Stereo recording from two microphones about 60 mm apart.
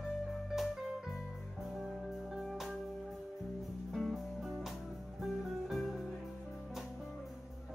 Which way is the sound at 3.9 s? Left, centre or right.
Centre.